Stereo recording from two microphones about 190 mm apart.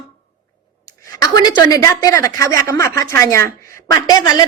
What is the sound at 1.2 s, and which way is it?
A woman's voice, 20° left (ahead or behind).